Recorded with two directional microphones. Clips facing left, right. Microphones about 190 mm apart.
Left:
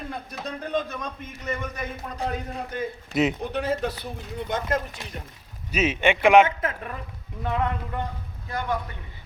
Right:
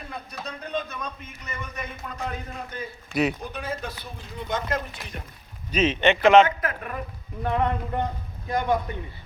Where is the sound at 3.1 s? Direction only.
20° left (ahead or behind).